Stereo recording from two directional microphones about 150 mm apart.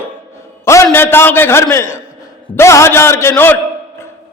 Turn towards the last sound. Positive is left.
turn(degrees=15)  # may be behind; listen again after turning